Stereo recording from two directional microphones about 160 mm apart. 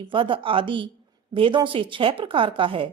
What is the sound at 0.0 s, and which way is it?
A woman's voice, 30° right (ahead or behind).